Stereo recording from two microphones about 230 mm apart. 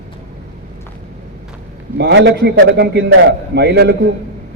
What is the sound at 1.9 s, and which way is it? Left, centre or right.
A man's voice, right.